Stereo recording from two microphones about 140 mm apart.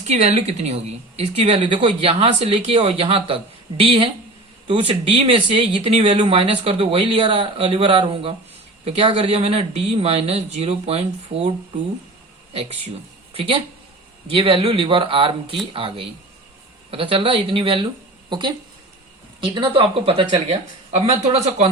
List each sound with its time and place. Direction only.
0.1 s a woman's voice: 50° right (ahead or behind)
6.1 s a woman's voice: 35° right (ahead or behind)
14.3 s speech: 40° right (ahead or behind)
19.5 s a woman's voice: 40° right (ahead or behind)